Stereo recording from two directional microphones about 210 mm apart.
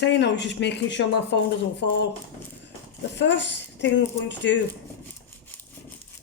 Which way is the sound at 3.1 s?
55° left (ahead or behind).